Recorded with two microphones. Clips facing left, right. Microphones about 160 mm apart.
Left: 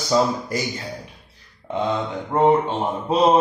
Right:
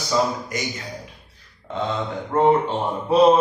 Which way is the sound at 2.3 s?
20° left (ahead or behind).